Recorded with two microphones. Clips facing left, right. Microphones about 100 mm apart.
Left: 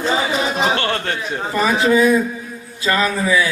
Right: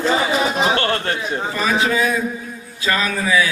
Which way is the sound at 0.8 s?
35° right (ahead or behind).